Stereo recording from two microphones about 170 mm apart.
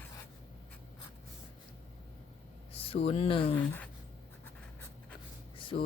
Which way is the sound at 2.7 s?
35° left (ahead or behind).